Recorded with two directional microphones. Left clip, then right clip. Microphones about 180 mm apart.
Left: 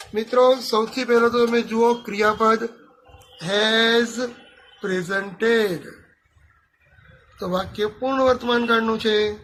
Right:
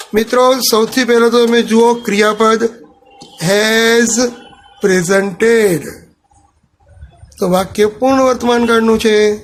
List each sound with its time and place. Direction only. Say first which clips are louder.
0.1 s speech: right 6 dB; 30° right (ahead or behind)
3.3 s a sound: right 8 dB; 35° right (ahead or behind)
5.5 s speech: right 8 dB; centre (ahead or behind)
7.3 s speech: right 12 dB; 30° right (ahead or behind)